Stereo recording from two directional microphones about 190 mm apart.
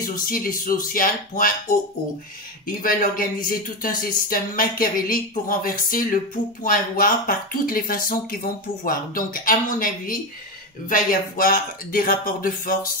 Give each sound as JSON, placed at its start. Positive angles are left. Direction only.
{"t": 0.0, "sound": "speech", "side_deg": 45}
{"t": 2.6, "sound": "speech", "side_deg": 50}